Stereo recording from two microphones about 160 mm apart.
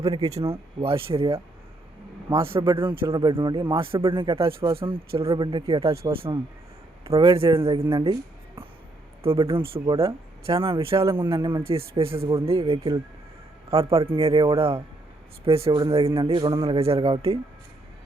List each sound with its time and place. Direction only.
0.8 s speech: 30° right (ahead or behind)
2.4 s speech: 30° right (ahead or behind)
9.2 s speech: 35° right (ahead or behind)
11.0 s a man's voice: 25° right (ahead or behind)
16.2 s speech: 25° right (ahead or behind)